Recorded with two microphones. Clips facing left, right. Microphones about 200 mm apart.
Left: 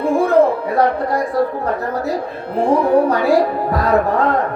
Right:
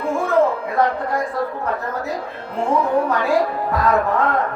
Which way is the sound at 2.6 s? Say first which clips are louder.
Left 5 dB; 35° left (ahead or behind).